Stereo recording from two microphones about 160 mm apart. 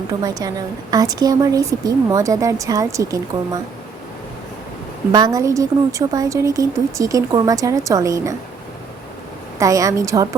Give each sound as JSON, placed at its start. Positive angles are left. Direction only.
{"t": 0.1, "sound": "a woman's voice", "side_deg": -25}
{"t": 5.1, "sound": "a woman's voice", "side_deg": -25}
{"t": 9.6, "sound": "a woman's voice", "side_deg": -20}